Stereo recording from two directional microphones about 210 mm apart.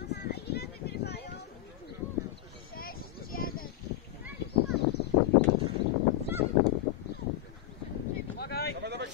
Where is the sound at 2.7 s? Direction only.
45° left (ahead or behind).